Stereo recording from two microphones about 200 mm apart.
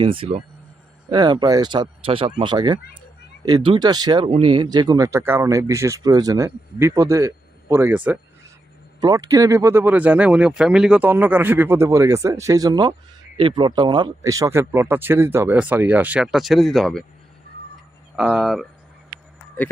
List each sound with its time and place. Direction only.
0.0 s speech: 25° right (ahead or behind); by 8.2 s 10° right (ahead or behind)
9.0 s speech: 20° right (ahead or behind); by 17.0 s centre (ahead or behind)
18.2 s speech: centre (ahead or behind)